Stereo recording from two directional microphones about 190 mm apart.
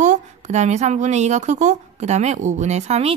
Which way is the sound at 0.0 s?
40° right (ahead or behind).